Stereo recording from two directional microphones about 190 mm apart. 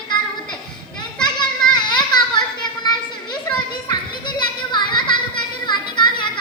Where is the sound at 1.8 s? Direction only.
20° left (ahead or behind).